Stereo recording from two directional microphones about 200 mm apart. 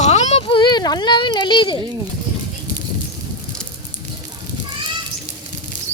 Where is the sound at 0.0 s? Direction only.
35° left (ahead or behind).